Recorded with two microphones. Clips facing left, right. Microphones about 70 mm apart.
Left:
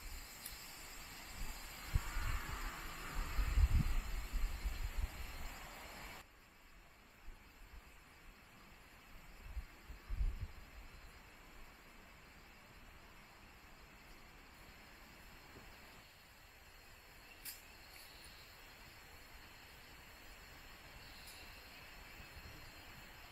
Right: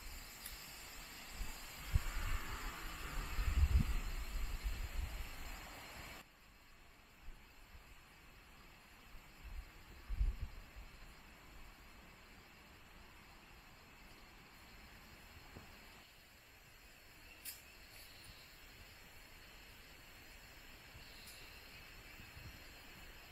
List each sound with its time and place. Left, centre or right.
0.0 s vehicle: centre